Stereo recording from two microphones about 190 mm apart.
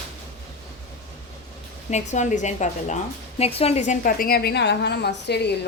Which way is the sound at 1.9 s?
40° left (ahead or behind).